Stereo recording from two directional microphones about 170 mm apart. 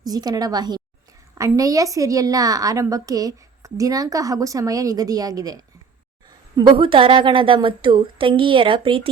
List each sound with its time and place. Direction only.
0.0 s a woman's voice: 20° right (ahead or behind)